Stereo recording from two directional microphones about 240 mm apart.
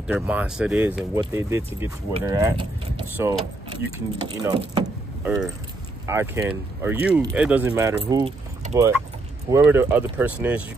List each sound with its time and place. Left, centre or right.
0.0 s speech: centre
4.4 s speech: centre
5.2 s speech: centre
8.0 s speech: right